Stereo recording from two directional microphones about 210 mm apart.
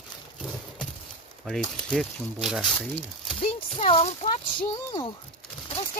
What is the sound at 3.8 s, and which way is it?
Speech, 35° left (ahead or behind).